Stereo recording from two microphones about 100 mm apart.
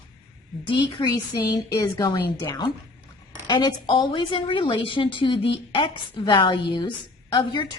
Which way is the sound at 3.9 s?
55° left (ahead or behind).